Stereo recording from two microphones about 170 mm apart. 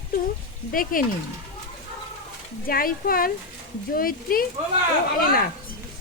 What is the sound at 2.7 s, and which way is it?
Speech, 60° left (ahead or behind).